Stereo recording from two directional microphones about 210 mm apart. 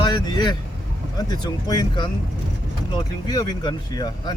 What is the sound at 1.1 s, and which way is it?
Speech, 20° left (ahead or behind).